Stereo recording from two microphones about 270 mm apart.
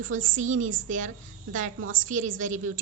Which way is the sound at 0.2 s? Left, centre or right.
Right.